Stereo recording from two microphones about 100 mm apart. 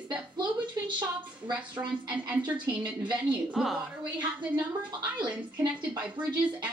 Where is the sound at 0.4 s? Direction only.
50° right (ahead or behind).